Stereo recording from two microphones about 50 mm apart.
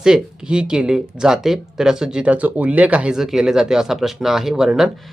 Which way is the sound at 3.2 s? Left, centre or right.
Centre.